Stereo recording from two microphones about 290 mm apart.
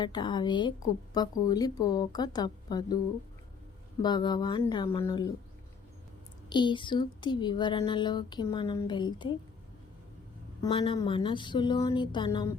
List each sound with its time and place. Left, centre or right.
0.0 s speech: centre
4.0 s speech: centre
6.5 s speech: centre
10.6 s speech: centre